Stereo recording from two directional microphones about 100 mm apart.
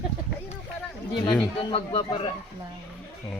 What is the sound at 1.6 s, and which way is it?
Speech, 65° left (ahead or behind).